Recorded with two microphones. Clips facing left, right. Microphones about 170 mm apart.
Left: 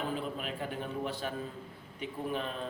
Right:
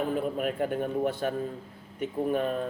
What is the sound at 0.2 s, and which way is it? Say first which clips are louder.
A man's voice: right 9 dB; 50° right (ahead or behind).